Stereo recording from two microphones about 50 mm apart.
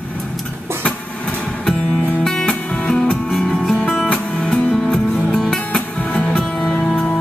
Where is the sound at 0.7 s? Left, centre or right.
Right.